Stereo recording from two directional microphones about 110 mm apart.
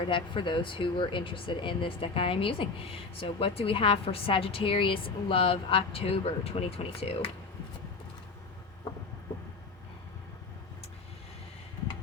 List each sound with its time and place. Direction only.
0.0 s speech: 50° left (ahead or behind)